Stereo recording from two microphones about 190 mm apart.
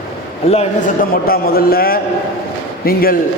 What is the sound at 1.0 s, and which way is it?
A man's voice, 50° left (ahead or behind).